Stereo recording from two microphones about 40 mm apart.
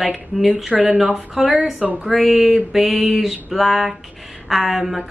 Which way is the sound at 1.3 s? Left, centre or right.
Centre.